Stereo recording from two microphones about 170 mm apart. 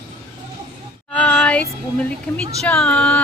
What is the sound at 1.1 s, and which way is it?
Music, 5° left (ahead or behind).